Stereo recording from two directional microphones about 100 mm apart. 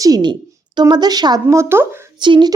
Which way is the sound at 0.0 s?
45° right (ahead or behind).